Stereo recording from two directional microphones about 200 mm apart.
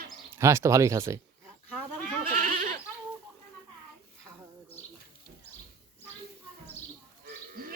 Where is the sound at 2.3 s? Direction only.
40° right (ahead or behind).